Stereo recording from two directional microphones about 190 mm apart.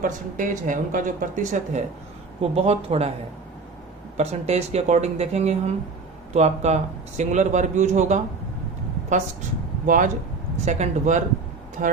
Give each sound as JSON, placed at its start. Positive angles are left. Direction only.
{"t": 0.0, "sound": "speech", "side_deg": -45}
{"t": 4.2, "sound": "speech", "side_deg": -35}
{"t": 9.8, "sound": "a man's voice", "side_deg": -45}